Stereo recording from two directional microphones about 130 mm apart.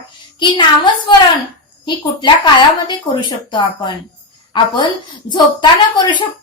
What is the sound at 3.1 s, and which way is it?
A woman's voice, 35° left (ahead or behind).